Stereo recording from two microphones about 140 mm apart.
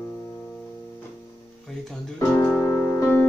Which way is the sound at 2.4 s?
15° left (ahead or behind).